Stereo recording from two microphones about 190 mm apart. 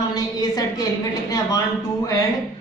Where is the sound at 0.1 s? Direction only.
20° left (ahead or behind).